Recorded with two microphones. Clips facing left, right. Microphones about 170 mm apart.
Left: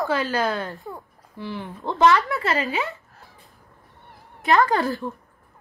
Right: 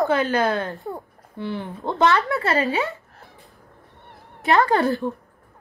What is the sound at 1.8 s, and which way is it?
Speech, 30° right (ahead or behind).